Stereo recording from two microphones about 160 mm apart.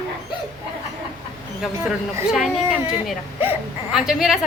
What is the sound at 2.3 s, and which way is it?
A woman's voice, centre (ahead or behind).